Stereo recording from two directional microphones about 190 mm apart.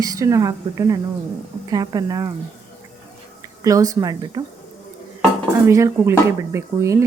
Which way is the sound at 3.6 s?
15° right (ahead or behind).